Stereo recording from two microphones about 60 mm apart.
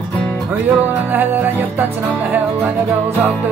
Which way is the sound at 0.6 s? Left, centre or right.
Right.